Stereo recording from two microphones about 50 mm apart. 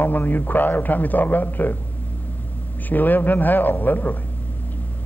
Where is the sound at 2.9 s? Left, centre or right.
Left.